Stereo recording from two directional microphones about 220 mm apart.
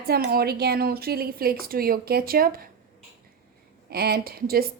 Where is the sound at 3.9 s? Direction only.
45° right (ahead or behind).